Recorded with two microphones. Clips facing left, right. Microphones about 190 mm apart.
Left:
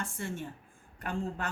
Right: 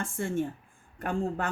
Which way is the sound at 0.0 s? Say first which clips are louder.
Right 7 dB; 50° right (ahead or behind).